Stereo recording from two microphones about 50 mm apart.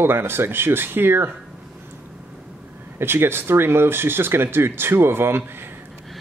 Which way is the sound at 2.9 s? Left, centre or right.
Right.